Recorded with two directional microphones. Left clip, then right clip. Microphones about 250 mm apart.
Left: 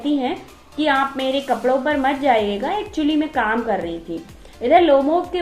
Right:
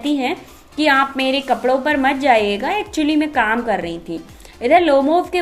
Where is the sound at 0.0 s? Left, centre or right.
Right.